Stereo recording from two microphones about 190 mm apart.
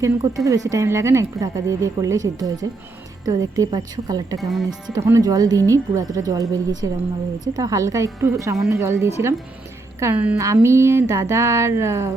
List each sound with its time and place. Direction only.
0.0 s a woman's voice: 15° right (ahead or behind)
4.4 s speech: centre (ahead or behind)
4.9 s a woman's voice: 15° right (ahead or behind)